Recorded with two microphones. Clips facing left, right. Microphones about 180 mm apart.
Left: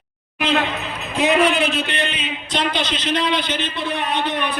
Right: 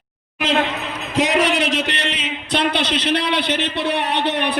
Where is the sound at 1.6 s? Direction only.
90° right.